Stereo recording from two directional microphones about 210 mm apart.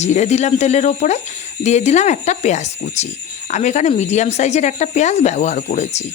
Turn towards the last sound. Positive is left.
turn(degrees=30)  # may be behind; listen again after turning